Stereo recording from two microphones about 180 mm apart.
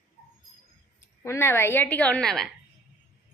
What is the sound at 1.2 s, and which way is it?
A woman's voice, 15° left (ahead or behind).